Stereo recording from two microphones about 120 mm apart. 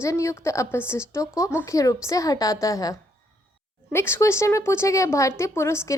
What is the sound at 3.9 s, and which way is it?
A woman's voice, 20° left (ahead or behind).